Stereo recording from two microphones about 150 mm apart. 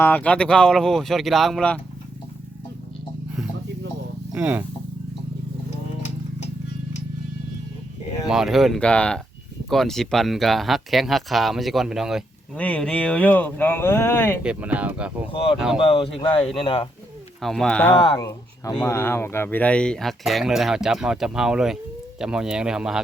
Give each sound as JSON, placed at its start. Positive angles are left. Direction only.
{"t": 0.0, "sound": "speech", "side_deg": 10}
{"t": 4.4, "sound": "speech", "side_deg": -10}
{"t": 8.3, "sound": "speech", "side_deg": 0}
{"t": 12.5, "sound": "speech", "side_deg": 10}
{"t": 14.4, "sound": "speech", "side_deg": -10}
{"t": 15.3, "sound": "speech", "side_deg": 40}
{"t": 15.5, "sound": "speech", "side_deg": -5}
{"t": 15.8, "sound": "speech", "side_deg": 40}
{"t": 17.4, "sound": "speech", "side_deg": 5}
{"t": 17.9, "sound": "speech", "side_deg": 35}
{"t": 18.2, "sound": "speech", "side_deg": 25}